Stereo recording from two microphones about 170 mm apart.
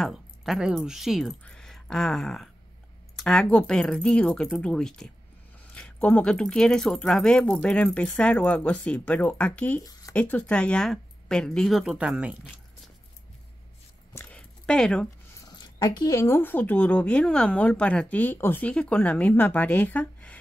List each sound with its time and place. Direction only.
0.0 s speech: centre (ahead or behind)
14.1 s a sound: 5° left (ahead or behind)
15.5 s speech: 25° left (ahead or behind); by 20.3 s 10° left (ahead or behind)